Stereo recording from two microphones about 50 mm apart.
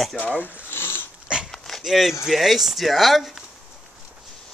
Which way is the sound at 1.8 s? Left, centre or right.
Centre.